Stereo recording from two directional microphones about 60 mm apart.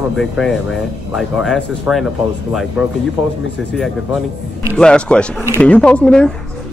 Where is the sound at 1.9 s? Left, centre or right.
Right.